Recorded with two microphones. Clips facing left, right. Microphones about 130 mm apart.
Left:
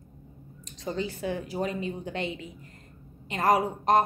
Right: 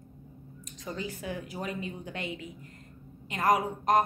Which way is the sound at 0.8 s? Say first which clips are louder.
Left 5 dB; 30° left (ahead or behind).